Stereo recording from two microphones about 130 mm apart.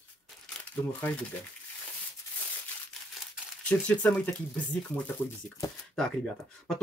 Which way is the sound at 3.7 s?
10° left (ahead or behind).